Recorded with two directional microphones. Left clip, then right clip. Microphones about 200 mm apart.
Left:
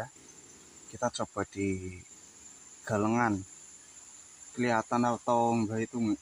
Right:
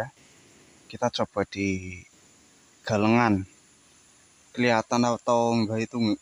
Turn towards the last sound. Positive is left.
turn(degrees=-45)  # may be behind; listen again after turning